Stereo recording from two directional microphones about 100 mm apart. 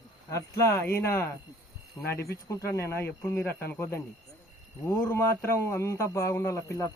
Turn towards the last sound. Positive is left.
turn(degrees=30)  # may be behind; listen again after turning